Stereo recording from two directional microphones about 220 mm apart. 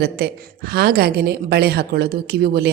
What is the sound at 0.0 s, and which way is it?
A woman's voice, 45° right (ahead or behind).